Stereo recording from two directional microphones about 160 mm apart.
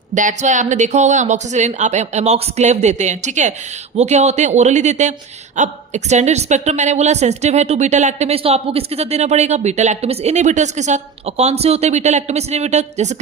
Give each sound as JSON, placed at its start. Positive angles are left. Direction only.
{"t": 0.1, "sound": "a woman's voice", "side_deg": -50}